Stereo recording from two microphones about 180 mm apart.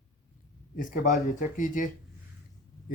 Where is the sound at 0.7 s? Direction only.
50° left (ahead or behind).